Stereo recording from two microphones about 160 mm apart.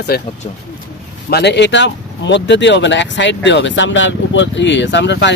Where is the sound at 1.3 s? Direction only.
90° left.